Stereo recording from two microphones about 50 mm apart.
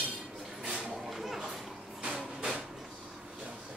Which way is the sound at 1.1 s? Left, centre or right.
Centre.